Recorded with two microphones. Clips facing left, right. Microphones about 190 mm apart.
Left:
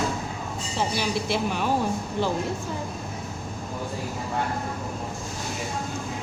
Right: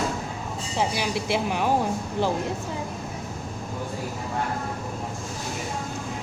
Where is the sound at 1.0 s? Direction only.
15° right (ahead or behind).